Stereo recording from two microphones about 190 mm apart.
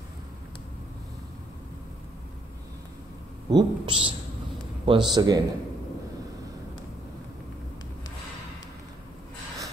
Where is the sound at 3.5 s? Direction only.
25° right (ahead or behind).